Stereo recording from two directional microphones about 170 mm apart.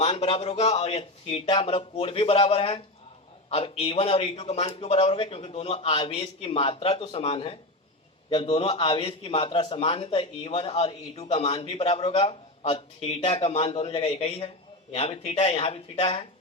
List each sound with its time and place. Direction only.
0.0 s a man's voice: 35° left (ahead or behind)